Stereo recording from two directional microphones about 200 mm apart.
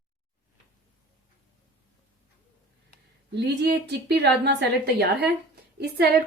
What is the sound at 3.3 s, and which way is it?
A woman's voice, 55° right (ahead or behind).